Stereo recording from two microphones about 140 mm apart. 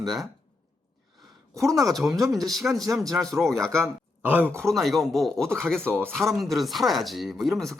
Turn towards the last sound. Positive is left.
turn(degrees=0)  # may be behind; listen again after turning